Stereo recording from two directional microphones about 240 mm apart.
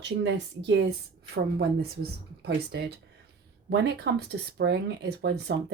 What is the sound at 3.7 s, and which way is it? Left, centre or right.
Speech, right.